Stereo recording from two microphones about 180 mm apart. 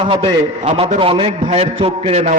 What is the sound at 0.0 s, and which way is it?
A man's voice, 30° right (ahead or behind).